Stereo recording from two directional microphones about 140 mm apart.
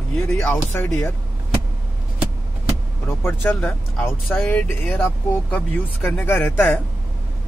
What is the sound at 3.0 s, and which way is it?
Speech, 15° left (ahead or behind).